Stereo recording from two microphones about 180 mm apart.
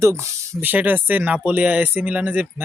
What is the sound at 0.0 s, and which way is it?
Speech, 15° right (ahead or behind).